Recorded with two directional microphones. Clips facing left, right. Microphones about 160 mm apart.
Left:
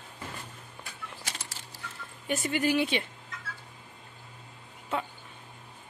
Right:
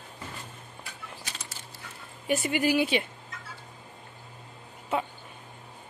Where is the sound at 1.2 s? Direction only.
85° left.